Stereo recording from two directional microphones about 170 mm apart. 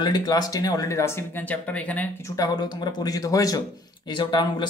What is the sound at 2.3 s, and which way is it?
Speech, 20° left (ahead or behind).